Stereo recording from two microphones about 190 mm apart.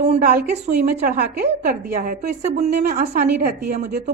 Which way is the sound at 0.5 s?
35° right (ahead or behind).